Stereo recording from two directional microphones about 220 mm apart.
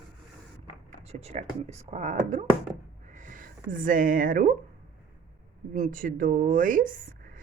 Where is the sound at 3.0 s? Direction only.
35° right (ahead or behind).